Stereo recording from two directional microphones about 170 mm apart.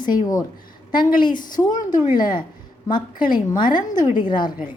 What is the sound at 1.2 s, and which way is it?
A woman's voice, 25° left (ahead or behind).